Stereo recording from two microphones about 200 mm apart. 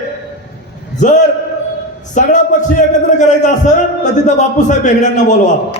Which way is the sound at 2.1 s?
40° left (ahead or behind).